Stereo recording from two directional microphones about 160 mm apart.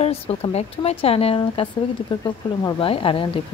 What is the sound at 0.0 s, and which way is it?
Speech, 40° left (ahead or behind).